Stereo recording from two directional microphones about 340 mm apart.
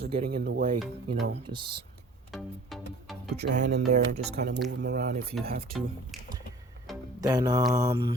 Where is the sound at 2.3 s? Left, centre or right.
Centre.